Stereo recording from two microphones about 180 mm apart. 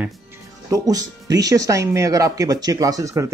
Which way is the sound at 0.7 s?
20° right (ahead or behind).